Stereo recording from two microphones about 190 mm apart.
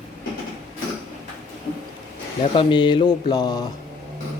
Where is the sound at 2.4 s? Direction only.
25° left (ahead or behind).